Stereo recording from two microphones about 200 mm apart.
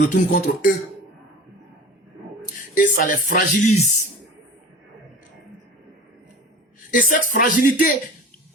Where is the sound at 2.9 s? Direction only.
45° left (ahead or behind).